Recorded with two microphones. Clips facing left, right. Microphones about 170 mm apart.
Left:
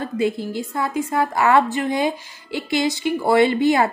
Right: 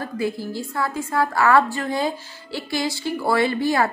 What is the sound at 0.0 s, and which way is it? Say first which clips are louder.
A woman's voice: left 4 dB; 20° left (ahead or behind).